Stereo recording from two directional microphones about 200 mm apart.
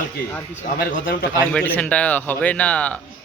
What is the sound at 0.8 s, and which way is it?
Speech, 45° left (ahead or behind).